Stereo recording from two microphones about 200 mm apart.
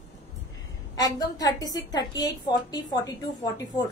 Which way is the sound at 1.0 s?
20° left (ahead or behind).